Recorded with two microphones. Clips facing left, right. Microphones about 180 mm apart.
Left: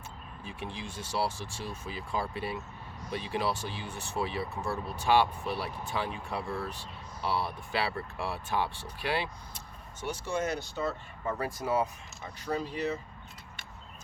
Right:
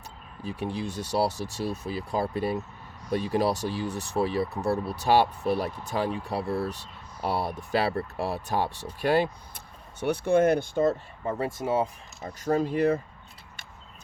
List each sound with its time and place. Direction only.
0.4 s speech: 40° right (ahead or behind)
10.0 s speech: 60° right (ahead or behind)
11.3 s speech: 25° right (ahead or behind)
12.2 s speech: 45° right (ahead or behind)